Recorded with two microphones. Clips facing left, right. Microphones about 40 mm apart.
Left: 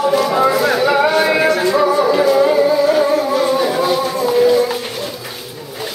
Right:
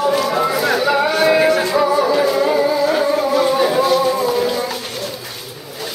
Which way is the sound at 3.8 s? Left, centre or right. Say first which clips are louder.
Right 1 dB; centre.